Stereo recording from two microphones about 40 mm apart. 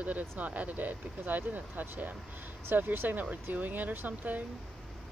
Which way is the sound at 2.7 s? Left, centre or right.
Right.